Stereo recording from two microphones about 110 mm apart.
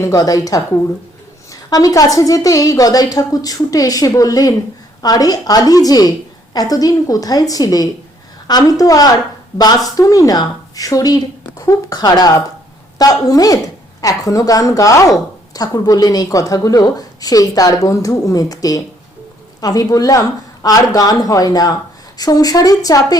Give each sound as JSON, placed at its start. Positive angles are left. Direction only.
{"t": 0.0, "sound": "speech", "side_deg": 30}
{"t": 1.7, "sound": "speech", "side_deg": 35}